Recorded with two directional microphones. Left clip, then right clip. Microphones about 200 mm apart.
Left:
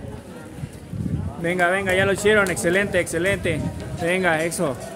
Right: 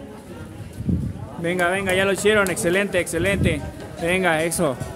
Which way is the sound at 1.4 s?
15° right (ahead or behind).